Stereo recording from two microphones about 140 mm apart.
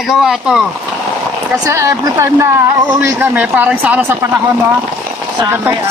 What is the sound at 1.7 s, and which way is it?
Speech, 20° right (ahead or behind).